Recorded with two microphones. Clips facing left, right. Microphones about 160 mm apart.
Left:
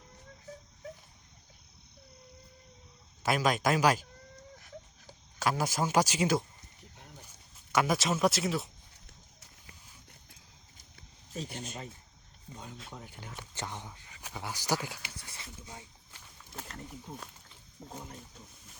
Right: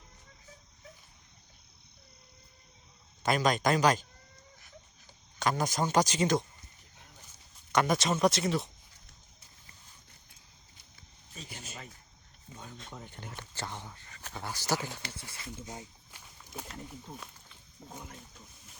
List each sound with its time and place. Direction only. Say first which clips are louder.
3.2 s speech: right 1 dB; 5° left (ahead or behind)
5.4 s speech: even; 5° left (ahead or behind)
7.7 s speech: right 1 dB; 5° left (ahead or behind)
10.9 s a sound: left 9 dB; 60° left (ahead or behind)
12.7 s speech: even; 5° left (ahead or behind)
15.6 s speech: right 5 dB; 30° right (ahead or behind)
16.1 s a sound: right 2 dB; 10° right (ahead or behind)
17.1 s speech: left 1 dB; 5° left (ahead or behind)